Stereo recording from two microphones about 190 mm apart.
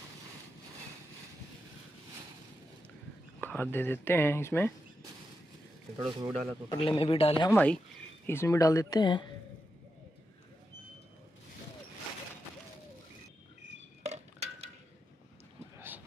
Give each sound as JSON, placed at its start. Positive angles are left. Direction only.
{"t": 3.3, "sound": "speech", "side_deg": 10}
{"t": 5.9, "sound": "speech", "side_deg": -20}
{"t": 6.7, "sound": "speech", "side_deg": 25}
{"t": 7.5, "sound": "speech", "side_deg": 5}
{"t": 14.0, "sound": "dishes", "side_deg": -35}